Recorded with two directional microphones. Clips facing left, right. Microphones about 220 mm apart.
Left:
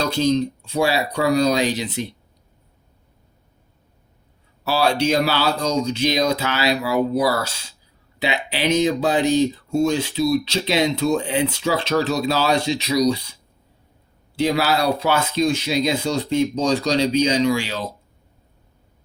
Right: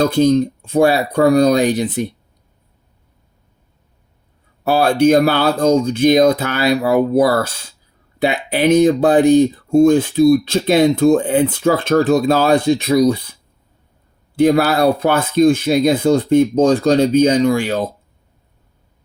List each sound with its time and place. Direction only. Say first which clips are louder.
0.0 s speech: right 6 dB; 55° right (ahead or behind)
4.6 s speech: right 7 dB; 50° right (ahead or behind)
14.3 s speech: right 7 dB; 50° right (ahead or behind)